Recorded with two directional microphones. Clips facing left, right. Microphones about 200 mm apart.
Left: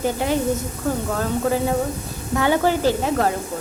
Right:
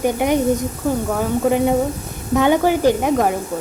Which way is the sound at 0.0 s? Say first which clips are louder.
Right 4 dB; 15° right (ahead or behind).